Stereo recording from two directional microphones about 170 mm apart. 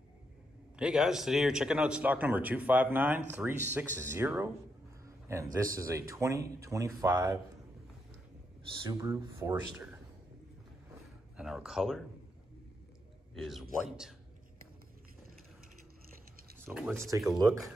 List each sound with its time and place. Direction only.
0.7 s speech: 5° right (ahead or behind)
5.0 s a sound: 20° right (ahead or behind)
5.8 s speech: 20° right (ahead or behind)
8.8 s speech: 20° right (ahead or behind)
11.3 s speech: 5° right (ahead or behind)
13.3 s a man's voice: centre (ahead or behind)
16.5 s speech: 10° right (ahead or behind)